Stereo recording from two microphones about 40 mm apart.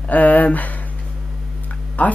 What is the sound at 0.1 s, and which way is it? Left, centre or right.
Speech, left.